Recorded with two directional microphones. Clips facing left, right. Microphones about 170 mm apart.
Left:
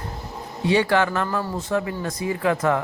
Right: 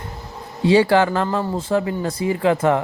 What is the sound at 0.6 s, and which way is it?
Speech, 30° right (ahead or behind).